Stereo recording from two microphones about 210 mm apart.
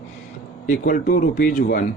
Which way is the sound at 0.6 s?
40° left (ahead or behind).